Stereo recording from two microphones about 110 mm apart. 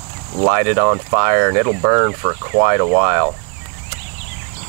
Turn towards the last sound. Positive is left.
turn(degrees=-25)  # may be behind; listen again after turning